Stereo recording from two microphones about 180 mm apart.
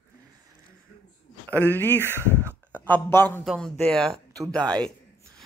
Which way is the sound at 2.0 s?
15° right (ahead or behind).